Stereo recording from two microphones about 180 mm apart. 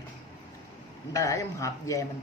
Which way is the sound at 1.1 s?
20° left (ahead or behind).